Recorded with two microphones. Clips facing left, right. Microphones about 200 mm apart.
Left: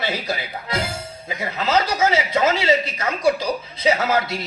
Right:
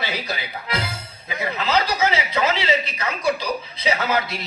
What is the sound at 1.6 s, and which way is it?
A woman's voice, 45° left (ahead or behind).